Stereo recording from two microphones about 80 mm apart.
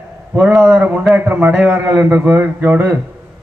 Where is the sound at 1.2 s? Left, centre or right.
Right.